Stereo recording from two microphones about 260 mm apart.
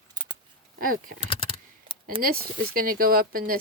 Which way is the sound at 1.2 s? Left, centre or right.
Left.